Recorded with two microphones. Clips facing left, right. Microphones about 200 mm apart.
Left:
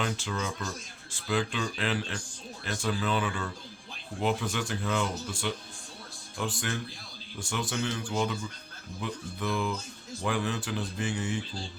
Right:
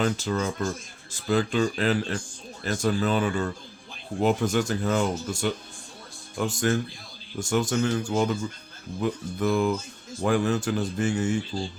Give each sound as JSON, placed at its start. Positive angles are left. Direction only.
{"t": 0.0, "sound": "speech", "side_deg": -40}